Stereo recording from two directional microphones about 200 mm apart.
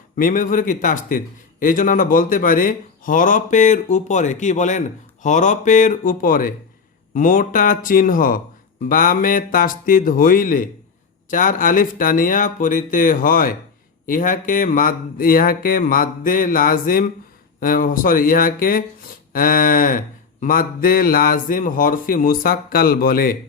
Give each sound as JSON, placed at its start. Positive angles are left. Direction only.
{"t": 0.2, "sound": "a man's voice", "side_deg": 40}
{"t": 7.1, "sound": "mantra", "side_deg": 40}
{"t": 11.3, "sound": "a man's voice", "side_deg": 40}
{"t": 14.1, "sound": "mantra", "side_deg": 40}